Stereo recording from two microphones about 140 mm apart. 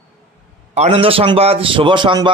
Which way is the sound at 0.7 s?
50° right (ahead or behind).